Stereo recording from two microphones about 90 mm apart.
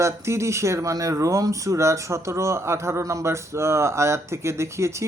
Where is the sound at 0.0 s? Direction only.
30° right (ahead or behind).